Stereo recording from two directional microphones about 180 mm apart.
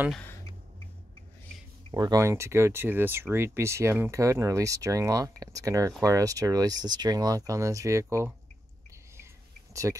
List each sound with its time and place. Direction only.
1.9 s speech: 20° right (ahead or behind)
9.9 s speech: 15° right (ahead or behind)